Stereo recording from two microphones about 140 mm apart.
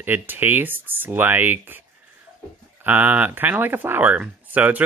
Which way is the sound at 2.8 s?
10° right (ahead or behind).